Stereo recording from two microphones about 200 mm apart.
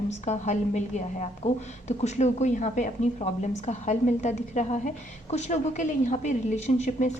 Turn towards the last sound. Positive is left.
turn(degrees=35)  # may be behind; listen again after turning